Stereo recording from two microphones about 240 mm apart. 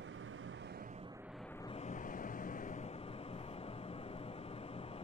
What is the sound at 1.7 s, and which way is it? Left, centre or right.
Vehicle, left.